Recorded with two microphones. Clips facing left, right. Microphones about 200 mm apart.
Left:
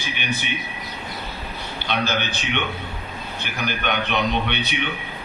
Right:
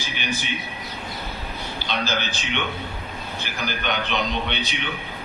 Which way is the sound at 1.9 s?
55° left (ahead or behind).